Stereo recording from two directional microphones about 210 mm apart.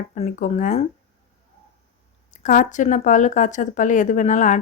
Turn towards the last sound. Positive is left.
turn(degrees=35)  # may be behind; listen again after turning